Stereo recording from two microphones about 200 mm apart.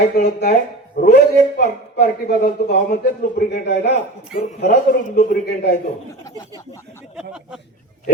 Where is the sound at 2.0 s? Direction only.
45° left (ahead or behind).